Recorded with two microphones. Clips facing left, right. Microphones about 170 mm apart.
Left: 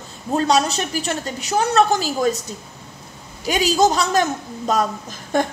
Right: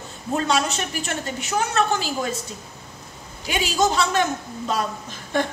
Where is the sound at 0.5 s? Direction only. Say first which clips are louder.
Left 4 dB; 35° left (ahead or behind).